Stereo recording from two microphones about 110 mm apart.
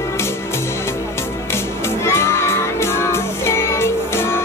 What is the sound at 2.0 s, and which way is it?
Music, 25° left (ahead or behind).